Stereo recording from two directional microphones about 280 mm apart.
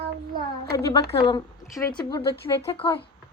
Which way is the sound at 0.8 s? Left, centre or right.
Centre.